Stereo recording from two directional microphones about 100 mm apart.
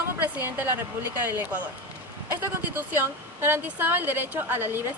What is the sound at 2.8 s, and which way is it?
A woman's voice, 20° right (ahead or behind).